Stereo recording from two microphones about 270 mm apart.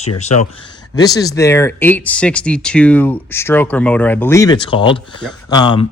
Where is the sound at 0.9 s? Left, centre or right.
Centre.